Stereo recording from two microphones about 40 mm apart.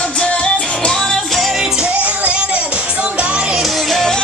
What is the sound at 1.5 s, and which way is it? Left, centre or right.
Music, centre.